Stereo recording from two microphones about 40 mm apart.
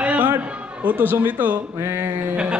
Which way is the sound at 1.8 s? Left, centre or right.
Right.